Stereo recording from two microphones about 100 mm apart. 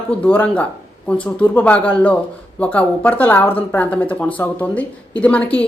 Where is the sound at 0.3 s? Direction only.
15° left (ahead or behind).